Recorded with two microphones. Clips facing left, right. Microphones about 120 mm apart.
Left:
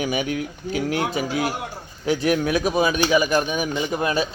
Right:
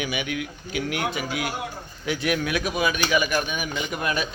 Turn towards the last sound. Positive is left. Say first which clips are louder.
# left 5 dB
turn(degrees=30)  # may be behind; listen again after turning